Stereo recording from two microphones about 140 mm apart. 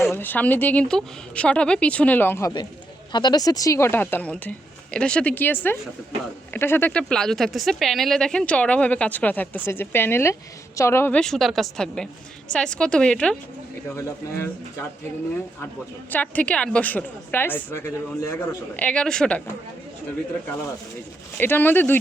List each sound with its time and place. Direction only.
0.0 s speech: 15° left (ahead or behind)
3.1 s a woman's voice: 30° left (ahead or behind)
11.2 s a woman's voice: centre (ahead or behind)
13.9 s speech: 15° left (ahead or behind)
16.0 s speech: 10° left (ahead or behind)
18.8 s speech: 5° left (ahead or behind)
21.3 s speech: 15° left (ahead or behind)